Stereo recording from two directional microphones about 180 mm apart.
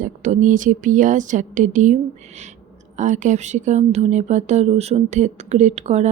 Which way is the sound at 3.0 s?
45° right (ahead or behind).